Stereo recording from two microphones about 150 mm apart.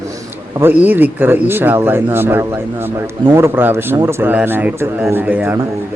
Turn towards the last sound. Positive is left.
turn(degrees=-10)  # may be behind; listen again after turning